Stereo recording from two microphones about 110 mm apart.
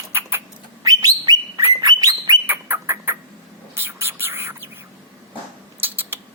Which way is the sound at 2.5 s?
20° right (ahead or behind).